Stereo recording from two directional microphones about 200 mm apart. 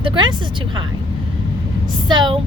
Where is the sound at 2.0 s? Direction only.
25° right (ahead or behind).